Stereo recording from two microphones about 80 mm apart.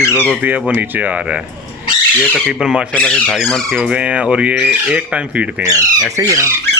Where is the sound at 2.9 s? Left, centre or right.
Centre.